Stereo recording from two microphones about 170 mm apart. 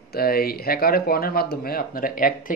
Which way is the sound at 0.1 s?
65° left (ahead or behind).